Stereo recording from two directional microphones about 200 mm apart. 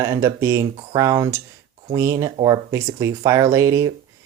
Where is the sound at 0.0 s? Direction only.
15° right (ahead or behind).